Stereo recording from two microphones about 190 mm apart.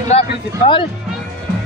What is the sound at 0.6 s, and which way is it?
Speech, 25° left (ahead or behind).